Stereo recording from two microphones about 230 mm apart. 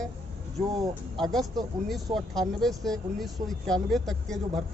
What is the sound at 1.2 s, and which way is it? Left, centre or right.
Speech, centre.